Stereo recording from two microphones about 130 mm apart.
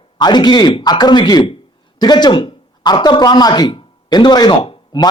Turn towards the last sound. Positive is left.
turn(degrees=40)  # may be behind; listen again after turning